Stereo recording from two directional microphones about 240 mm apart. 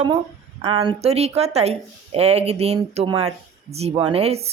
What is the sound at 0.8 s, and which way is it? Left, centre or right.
Speech, right.